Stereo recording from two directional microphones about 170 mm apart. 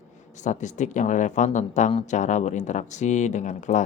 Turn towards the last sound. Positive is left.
turn(degrees=45)  # may be behind; listen again after turning